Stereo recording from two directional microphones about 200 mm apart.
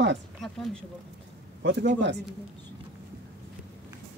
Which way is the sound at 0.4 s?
Centre (ahead or behind).